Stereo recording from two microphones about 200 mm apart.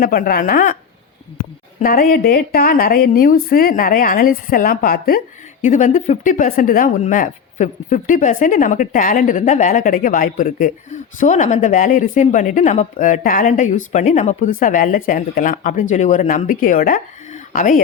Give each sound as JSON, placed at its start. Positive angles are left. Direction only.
{"t": 0.0, "sound": "a woman's voice", "side_deg": 50}
{"t": 1.8, "sound": "a woman's voice", "side_deg": 45}